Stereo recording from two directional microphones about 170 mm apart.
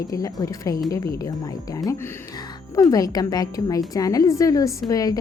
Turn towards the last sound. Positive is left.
turn(degrees=20)  # may be behind; listen again after turning